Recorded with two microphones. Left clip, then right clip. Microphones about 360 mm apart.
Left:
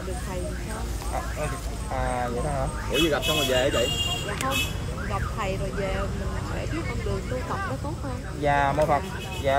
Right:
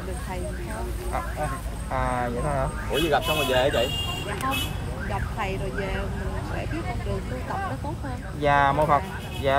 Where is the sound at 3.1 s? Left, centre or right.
Centre.